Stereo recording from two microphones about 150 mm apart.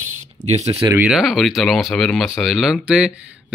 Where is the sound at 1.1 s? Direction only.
Centre (ahead or behind).